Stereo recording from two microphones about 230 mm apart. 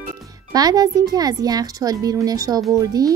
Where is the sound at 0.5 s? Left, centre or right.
Centre.